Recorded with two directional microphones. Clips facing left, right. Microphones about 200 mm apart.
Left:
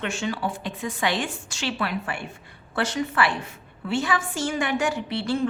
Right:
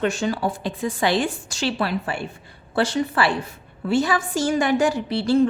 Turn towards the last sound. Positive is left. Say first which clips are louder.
# right 7 dB
turn(degrees=-35)  # may be behind; listen again after turning